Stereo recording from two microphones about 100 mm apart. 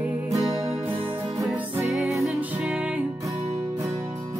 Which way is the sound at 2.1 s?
30° right (ahead or behind).